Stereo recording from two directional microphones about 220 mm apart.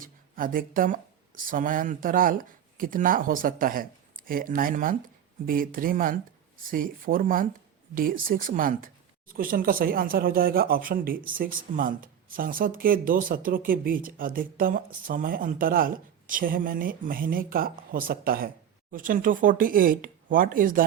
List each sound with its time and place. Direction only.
0.0 s speech: 40° right (ahead or behind)